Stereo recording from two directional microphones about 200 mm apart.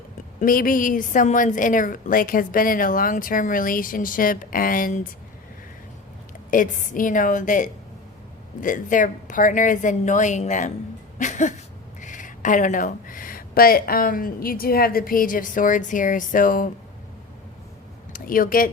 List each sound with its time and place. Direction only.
0.3 s a woman's voice: 45° left (ahead or behind)
6.5 s a woman's voice: 40° left (ahead or behind)
18.1 s speech: 45° left (ahead or behind)